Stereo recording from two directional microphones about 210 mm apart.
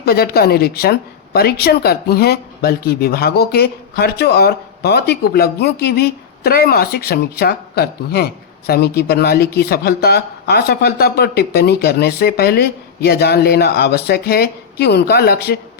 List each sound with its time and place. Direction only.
0.0 s a woman's voice: 45° left (ahead or behind)